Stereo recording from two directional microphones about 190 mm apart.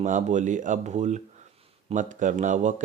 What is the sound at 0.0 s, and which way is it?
Speech, 40° right (ahead or behind).